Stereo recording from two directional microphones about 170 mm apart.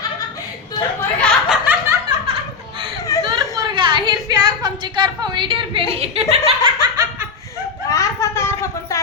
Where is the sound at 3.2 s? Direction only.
25° right (ahead or behind).